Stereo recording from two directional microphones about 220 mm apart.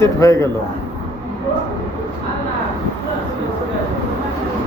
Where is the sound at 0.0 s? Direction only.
15° left (ahead or behind).